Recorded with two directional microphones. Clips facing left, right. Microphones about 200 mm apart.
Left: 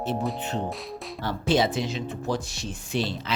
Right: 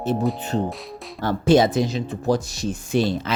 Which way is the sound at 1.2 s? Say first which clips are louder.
Right 7 dB; 45° right (ahead or behind).